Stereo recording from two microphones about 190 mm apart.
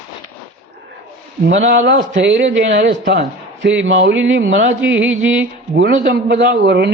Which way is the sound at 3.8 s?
70° right (ahead or behind).